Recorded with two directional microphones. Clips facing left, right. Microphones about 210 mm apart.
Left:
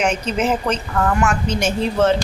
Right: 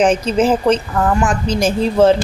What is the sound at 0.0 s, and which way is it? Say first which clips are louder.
A woman's voice: right 6 dB; 30° right (ahead or behind).